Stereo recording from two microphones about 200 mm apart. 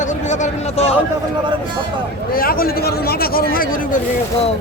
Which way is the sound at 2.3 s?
45° left (ahead or behind).